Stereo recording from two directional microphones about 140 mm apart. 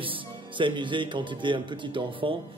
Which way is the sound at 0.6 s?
35° right (ahead or behind).